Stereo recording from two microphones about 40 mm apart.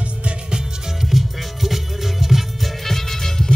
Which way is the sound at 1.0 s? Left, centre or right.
Centre.